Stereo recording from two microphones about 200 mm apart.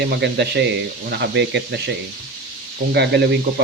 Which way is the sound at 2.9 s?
55° right (ahead or behind).